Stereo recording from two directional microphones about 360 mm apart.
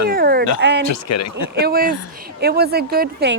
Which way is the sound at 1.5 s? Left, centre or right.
Right.